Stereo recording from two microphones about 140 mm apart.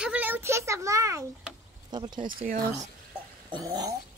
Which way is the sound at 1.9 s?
30° right (ahead or behind).